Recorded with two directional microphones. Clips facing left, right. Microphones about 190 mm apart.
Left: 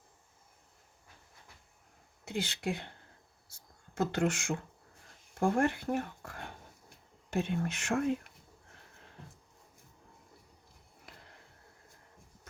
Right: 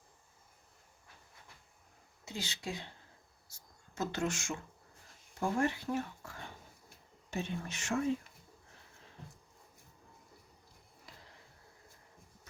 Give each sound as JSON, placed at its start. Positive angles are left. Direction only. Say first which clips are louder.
{"t": 2.2, "sound": "speech", "louder": "left 6 dB", "side_deg": 55}
{"t": 3.9, "sound": "speech", "louder": "left 5 dB", "side_deg": 55}